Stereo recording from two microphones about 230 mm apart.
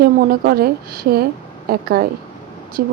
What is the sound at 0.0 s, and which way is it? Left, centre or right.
A woman's voice, right.